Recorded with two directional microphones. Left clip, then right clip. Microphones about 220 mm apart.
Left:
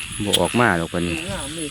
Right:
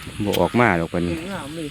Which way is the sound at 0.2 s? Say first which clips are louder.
Left 1 dB; 15° right (ahead or behind).